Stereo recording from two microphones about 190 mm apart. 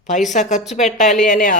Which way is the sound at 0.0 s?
40° left (ahead or behind).